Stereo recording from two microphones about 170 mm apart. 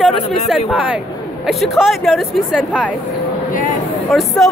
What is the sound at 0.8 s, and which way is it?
A woman's voice, 5° right (ahead or behind).